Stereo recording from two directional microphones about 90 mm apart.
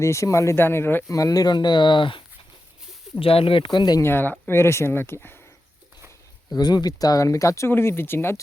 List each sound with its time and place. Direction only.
0.0 s speech: 35° left (ahead or behind)
1.0 s speech: 40° left (ahead or behind); by 2.2 s 65° left (ahead or behind)
3.2 s speech: 90° left; by 4.0 s 55° left (ahead or behind)
4.0 s speech: 25° left (ahead or behind)
6.5 s speech: 50° left (ahead or behind); by 8.4 s 25° left (ahead or behind)